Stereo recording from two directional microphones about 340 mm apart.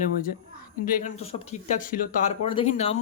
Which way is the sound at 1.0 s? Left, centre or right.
Left.